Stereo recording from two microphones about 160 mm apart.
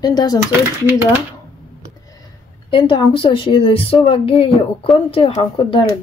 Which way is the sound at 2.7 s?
30° left (ahead or behind).